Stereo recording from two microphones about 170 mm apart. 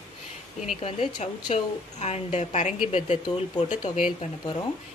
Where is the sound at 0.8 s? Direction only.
35° left (ahead or behind).